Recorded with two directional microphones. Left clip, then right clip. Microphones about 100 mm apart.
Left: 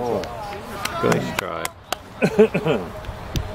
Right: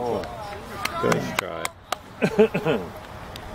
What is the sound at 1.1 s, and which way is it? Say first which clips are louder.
Speech: left 3 dB; 35° right (ahead or behind).